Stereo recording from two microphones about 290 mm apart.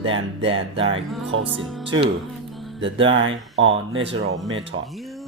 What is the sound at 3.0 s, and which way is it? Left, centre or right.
Speech, right.